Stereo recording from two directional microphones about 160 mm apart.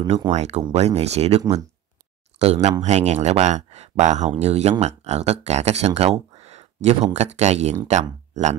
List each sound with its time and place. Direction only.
0.3 s speech: 45° right (ahead or behind)